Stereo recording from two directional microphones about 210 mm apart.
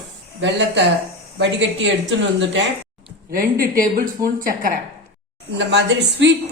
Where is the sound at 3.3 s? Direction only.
40° right (ahead or behind).